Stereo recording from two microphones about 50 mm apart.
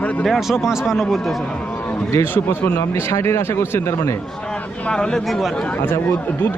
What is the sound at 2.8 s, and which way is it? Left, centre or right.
Speech, left.